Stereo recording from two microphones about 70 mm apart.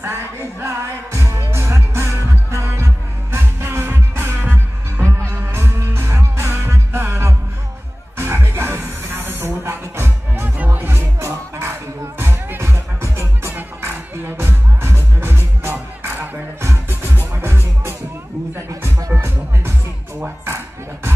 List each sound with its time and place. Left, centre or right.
0.0 s music: right
18.9 s music: right
20.4 s a sound: right